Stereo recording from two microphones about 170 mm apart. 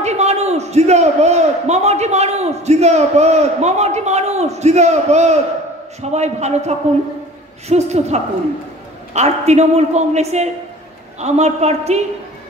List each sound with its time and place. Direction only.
0.0 s a man's voice: 40° right (ahead or behind)